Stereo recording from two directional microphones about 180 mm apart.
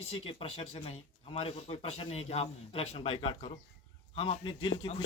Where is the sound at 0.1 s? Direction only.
30° left (ahead or behind).